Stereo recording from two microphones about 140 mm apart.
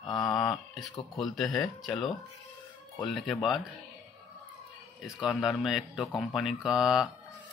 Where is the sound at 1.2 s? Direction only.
Centre (ahead or behind).